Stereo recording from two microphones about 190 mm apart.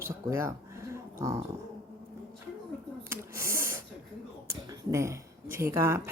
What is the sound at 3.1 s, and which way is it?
Snake, 15° right (ahead or behind).